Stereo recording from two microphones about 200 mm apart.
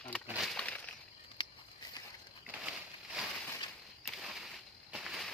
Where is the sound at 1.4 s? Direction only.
20° left (ahead or behind).